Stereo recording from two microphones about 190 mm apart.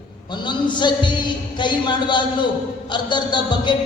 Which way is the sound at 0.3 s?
25° left (ahead or behind).